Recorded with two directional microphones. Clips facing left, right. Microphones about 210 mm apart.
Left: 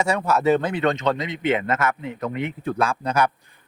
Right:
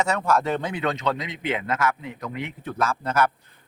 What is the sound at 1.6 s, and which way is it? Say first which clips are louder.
Speech: left 2 dB; 50° left (ahead or behind).